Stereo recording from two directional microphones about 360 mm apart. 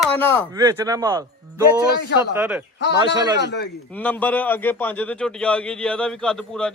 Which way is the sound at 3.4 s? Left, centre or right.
Left.